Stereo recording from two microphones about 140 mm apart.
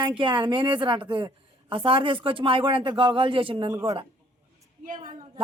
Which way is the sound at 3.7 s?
25° right (ahead or behind).